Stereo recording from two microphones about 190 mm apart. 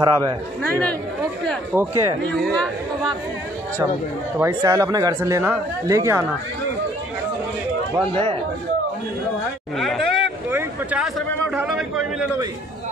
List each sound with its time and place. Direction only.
0.0 s speech: 15° right (ahead or behind)
1.5 s speech: 5° right (ahead or behind)
2.2 s speech: 5° left (ahead or behind)
4.4 s speech: 15° right (ahead or behind)
7.9 s speech: 25° right (ahead or behind)
9.8 s speech: centre (ahead or behind)